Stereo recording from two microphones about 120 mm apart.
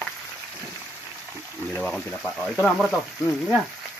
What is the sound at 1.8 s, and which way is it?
Speech, 5° left (ahead or behind).